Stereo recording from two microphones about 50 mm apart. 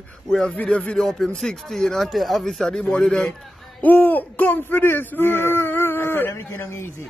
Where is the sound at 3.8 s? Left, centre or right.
Left.